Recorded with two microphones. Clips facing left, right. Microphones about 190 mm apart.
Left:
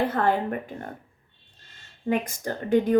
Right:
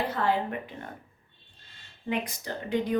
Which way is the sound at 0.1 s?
50° left (ahead or behind).